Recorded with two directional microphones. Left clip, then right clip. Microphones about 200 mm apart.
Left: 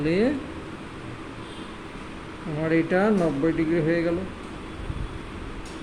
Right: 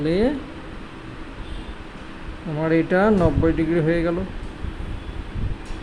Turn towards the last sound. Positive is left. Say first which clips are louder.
# right 3 dB
turn(degrees=-30)  # may be behind; listen again after turning